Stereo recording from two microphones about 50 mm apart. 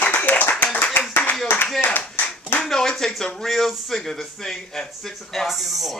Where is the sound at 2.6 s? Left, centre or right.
Centre.